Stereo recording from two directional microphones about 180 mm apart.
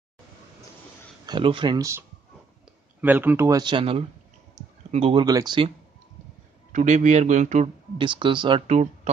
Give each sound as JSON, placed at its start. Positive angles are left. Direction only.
{"t": 1.2, "sound": "a man's voice", "side_deg": -25}
{"t": 5.2, "sound": "speech", "side_deg": -20}
{"t": 6.7, "sound": "a man's voice", "side_deg": -45}
{"t": 8.0, "sound": "speech", "side_deg": -25}